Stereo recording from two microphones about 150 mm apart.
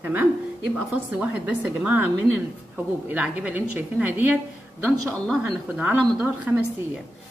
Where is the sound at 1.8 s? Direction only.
10° right (ahead or behind).